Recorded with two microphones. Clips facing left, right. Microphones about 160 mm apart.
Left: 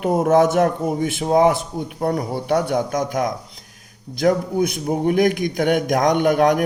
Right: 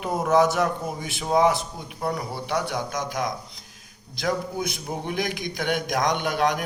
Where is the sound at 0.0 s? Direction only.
50° left (ahead or behind).